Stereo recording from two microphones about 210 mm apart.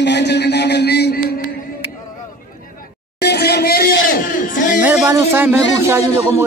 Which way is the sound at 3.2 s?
50° left (ahead or behind).